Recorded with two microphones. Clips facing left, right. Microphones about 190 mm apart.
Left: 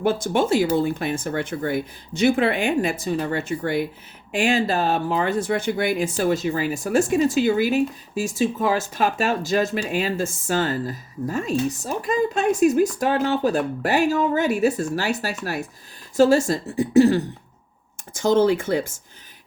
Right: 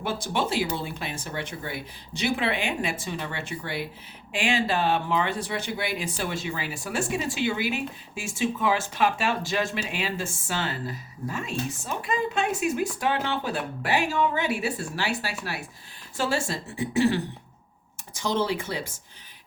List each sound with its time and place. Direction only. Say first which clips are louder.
0.0 s speech: left 7 dB; 45° left (ahead or behind)